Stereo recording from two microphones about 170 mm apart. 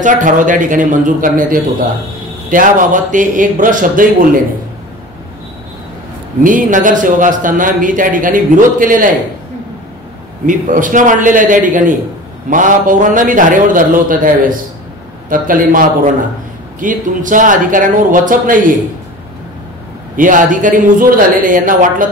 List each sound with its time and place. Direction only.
0.0 s a man's voice: 50° right (ahead or behind)
6.4 s a man's voice: 50° right (ahead or behind)
10.4 s a man's voice: 50° right (ahead or behind)
16.8 s a man's voice: 50° right (ahead or behind)
20.2 s a man's voice: 50° right (ahead or behind)